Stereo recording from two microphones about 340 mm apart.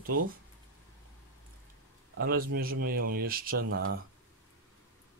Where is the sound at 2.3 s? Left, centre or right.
Right.